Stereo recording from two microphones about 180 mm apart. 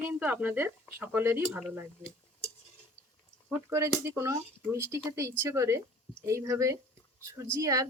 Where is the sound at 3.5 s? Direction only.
15° right (ahead or behind).